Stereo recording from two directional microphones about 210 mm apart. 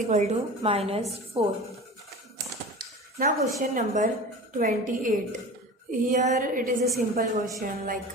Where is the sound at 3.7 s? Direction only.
35° right (ahead or behind).